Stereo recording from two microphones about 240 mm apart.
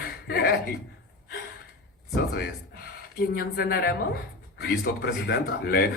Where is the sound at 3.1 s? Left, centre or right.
Left.